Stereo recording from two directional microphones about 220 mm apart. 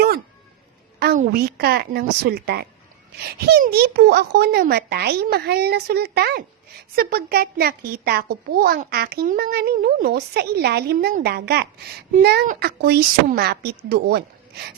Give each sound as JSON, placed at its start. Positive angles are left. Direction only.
{"t": 0.9, "sound": "a child's voice", "side_deg": -40}